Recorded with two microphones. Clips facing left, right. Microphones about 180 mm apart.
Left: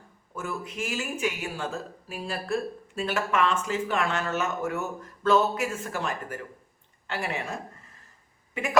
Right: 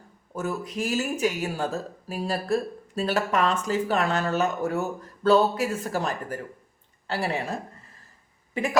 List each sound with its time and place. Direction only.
0.3 s speech: 40° right (ahead or behind)